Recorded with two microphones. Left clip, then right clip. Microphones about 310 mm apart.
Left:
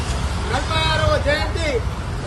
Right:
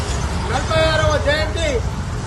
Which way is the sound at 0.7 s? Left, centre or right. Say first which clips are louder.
Right 3 dB; centre.